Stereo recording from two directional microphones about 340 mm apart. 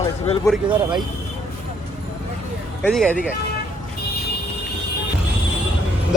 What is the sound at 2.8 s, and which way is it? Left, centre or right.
Speech, centre.